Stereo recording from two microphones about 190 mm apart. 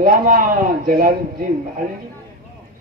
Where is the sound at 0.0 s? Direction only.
45° right (ahead or behind).